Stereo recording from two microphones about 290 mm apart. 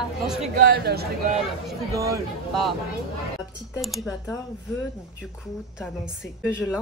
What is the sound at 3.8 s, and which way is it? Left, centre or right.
Speech, centre.